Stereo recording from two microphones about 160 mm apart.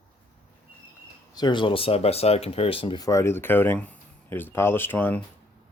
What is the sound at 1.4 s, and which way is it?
Speech, 30° left (ahead or behind).